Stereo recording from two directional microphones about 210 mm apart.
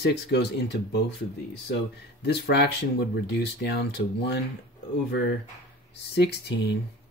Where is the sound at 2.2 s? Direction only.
50° left (ahead or behind).